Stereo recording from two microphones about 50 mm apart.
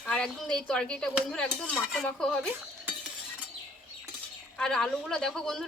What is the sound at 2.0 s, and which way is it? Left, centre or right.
Speech, centre.